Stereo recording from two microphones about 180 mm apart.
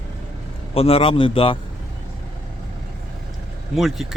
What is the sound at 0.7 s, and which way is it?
Speech, 30° left (ahead or behind).